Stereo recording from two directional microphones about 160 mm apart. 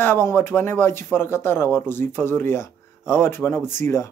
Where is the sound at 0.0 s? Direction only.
15° left (ahead or behind).